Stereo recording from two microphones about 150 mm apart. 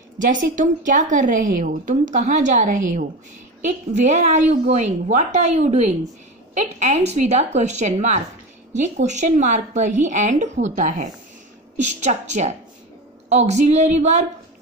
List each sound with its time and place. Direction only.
0.2 s a woman's voice: 60° right (ahead or behind)